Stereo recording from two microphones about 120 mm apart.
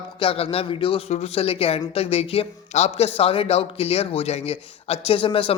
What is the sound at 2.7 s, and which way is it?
A man's voice, 65° left (ahead or behind).